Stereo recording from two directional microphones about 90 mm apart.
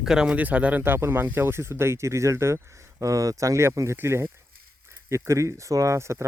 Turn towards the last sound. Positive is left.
turn(degrees=-30)  # may be behind; listen again after turning